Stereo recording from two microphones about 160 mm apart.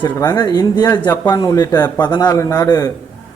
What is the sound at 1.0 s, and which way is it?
Speech, 15° left (ahead or behind).